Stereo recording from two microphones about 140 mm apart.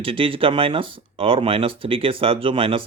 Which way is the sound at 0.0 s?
40° right (ahead or behind).